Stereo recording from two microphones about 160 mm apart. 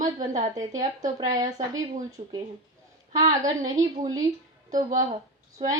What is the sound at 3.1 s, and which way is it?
Speech, 25° right (ahead or behind).